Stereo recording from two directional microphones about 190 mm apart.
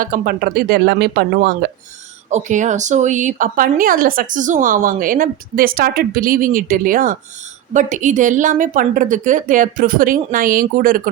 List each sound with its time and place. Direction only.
0.0 s speech: 50° right (ahead or behind)
2.3 s speech: 40° right (ahead or behind)